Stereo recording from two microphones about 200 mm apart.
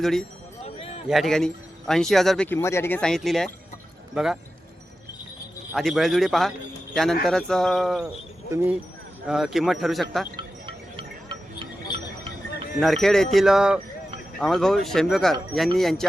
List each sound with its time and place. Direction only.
0.0 s speech: centre (ahead or behind)
5.7 s speech: centre (ahead or behind)
10.3 s a sound: 25° right (ahead or behind)
12.8 s speech: centre (ahead or behind)